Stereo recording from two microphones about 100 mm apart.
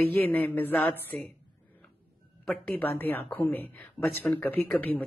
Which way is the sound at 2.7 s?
20° left (ahead or behind).